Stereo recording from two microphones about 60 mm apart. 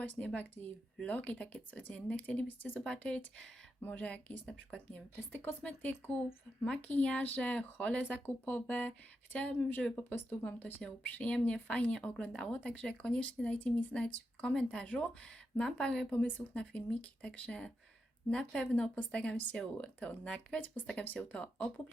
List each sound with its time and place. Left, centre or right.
0.3 s speech: left
5.3 s speech: left